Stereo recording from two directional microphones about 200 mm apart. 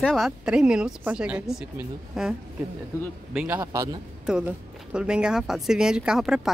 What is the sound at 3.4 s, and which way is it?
A man's voice, 10° right (ahead or behind).